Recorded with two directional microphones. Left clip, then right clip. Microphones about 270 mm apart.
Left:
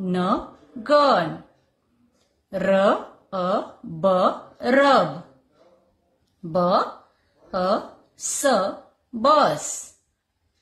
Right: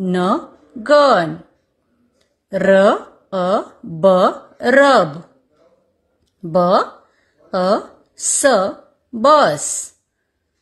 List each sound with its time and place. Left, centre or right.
0.0 s speech: right
2.5 s speech: right
6.5 s speech: right